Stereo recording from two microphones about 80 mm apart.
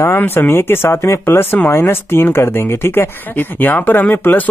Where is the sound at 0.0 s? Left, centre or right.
Left.